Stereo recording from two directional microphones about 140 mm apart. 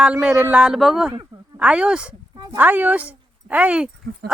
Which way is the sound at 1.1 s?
30° right (ahead or behind).